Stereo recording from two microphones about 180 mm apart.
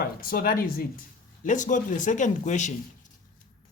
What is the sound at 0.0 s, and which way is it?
Speech, 55° left (ahead or behind).